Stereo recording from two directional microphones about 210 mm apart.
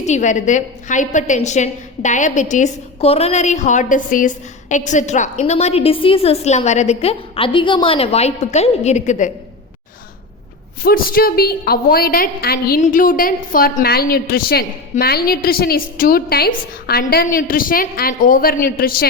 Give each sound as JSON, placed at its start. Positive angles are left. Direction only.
{"t": 0.0, "sound": "a woman's voice", "side_deg": 35}
{"t": 10.8, "sound": "a woman's voice", "side_deg": 45}